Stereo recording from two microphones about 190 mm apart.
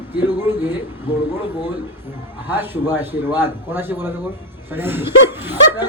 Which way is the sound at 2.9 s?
10° right (ahead or behind).